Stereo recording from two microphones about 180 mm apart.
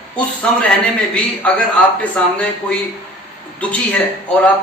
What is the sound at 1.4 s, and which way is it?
A man's voice, 5° left (ahead or behind).